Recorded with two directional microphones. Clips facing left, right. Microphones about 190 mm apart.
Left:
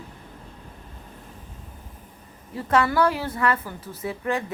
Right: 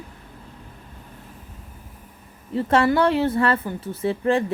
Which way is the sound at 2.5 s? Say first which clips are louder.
Right 3 dB; 25° right (ahead or behind).